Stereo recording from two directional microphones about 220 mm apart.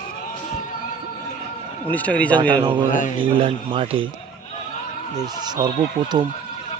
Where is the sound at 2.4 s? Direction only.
20° right (ahead or behind).